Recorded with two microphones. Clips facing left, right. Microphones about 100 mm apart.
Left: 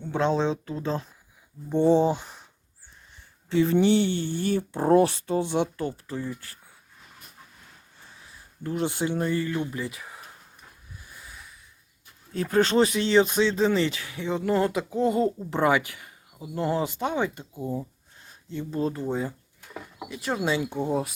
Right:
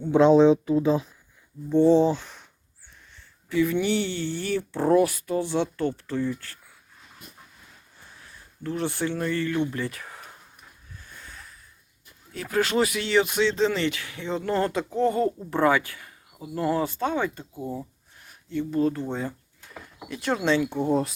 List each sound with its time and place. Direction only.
0.1 s speech: 15° right (ahead or behind)
1.7 s speech: 15° left (ahead or behind)
3.5 s speech: 30° left (ahead or behind)
4.8 s speech: 35° left (ahead or behind); by 6.0 s 10° left (ahead or behind)
6.2 s speech: 30° left (ahead or behind)
8.6 s speech: 20° left (ahead or behind)
9.7 s speech: 5° left (ahead or behind)
10.9 s a sound: 10° left (ahead or behind)
12.3 s speech: 35° left (ahead or behind); by 17.4 s 20° left (ahead or behind)
17.5 s speech: 10° right (ahead or behind)
18.2 s speech: 25° left (ahead or behind)
19.0 s speech: 10° left (ahead or behind)